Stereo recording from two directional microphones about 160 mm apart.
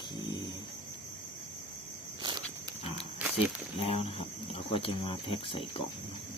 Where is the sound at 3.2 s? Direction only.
10° right (ahead or behind).